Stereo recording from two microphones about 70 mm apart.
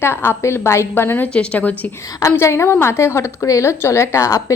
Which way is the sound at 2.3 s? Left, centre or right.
Left.